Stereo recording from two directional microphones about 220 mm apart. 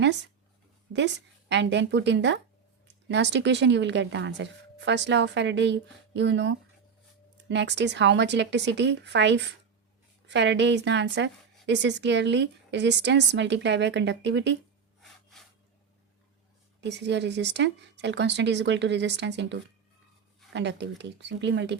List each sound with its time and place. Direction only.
0.9 s a woman's voice: 55° right (ahead or behind)
16.8 s a woman's voice: 50° right (ahead or behind)